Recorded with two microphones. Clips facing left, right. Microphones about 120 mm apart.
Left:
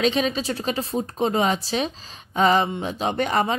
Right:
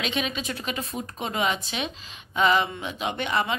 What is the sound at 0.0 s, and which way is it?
Speech, 35° left (ahead or behind).